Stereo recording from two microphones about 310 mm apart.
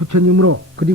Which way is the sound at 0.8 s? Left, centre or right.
Right.